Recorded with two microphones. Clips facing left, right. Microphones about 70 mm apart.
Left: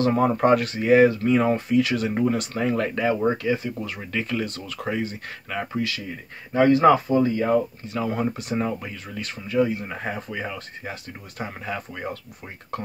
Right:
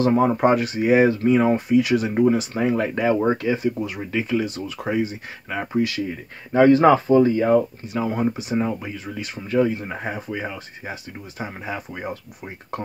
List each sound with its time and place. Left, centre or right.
0.0 s speech: centre
1.3 s speech: centre
2.9 s speech: right
3.7 s speech: centre
5.7 s speech: right
6.5 s speech: right
8.2 s speech: centre
9.1 s speech: centre
9.5 s speech: right
9.8 s speech: right
10.1 s speech: centre